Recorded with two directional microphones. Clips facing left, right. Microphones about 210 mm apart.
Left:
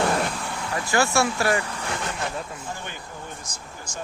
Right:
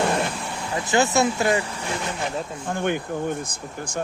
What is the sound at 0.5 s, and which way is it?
Speech, 20° right (ahead or behind).